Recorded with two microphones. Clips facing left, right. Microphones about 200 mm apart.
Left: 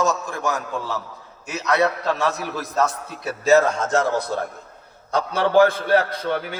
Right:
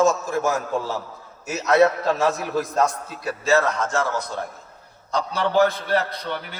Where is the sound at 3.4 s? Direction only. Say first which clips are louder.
Left 4 dB; 25° left (ahead or behind).